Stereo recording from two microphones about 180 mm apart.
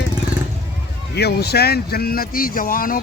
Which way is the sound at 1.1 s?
65° left (ahead or behind).